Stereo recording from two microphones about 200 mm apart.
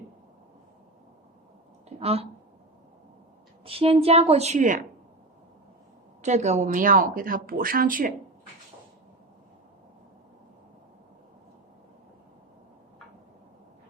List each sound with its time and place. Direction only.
2.0 s speech: 30° right (ahead or behind)
3.6 s a woman's voice: 30° right (ahead or behind)
6.2 s speech: 35° right (ahead or behind)